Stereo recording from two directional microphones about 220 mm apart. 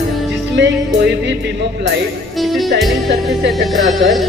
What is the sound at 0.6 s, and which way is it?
Music, 50° right (ahead or behind).